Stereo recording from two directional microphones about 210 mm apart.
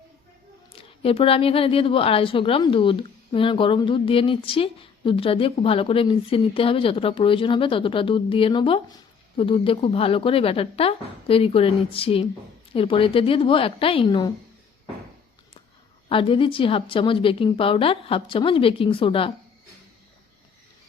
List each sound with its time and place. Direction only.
0.8 s a woman's voice: 25° left (ahead or behind)
16.0 s a woman's voice: 25° left (ahead or behind)